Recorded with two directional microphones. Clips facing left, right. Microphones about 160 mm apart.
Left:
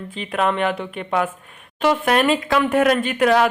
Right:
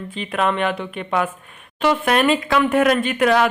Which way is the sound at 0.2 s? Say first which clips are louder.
Even; 35° left (ahead or behind).